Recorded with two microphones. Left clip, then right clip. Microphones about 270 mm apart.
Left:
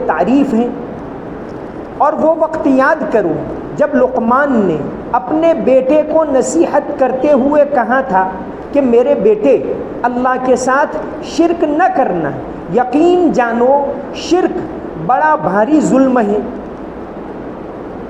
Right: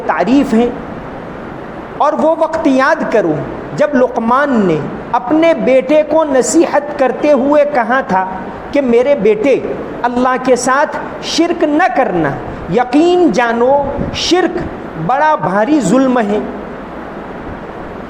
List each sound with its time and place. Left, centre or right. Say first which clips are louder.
0.1 s a woman's voice: right 2 dB; right
2.0 s a man's voice: even; right